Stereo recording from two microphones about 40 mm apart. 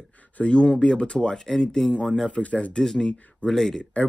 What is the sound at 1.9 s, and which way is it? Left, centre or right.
Speech, left.